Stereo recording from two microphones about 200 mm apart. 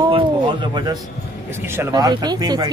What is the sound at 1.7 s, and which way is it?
Speech, 15° right (ahead or behind).